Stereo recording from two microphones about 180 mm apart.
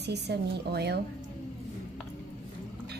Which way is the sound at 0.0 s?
65° right (ahead or behind).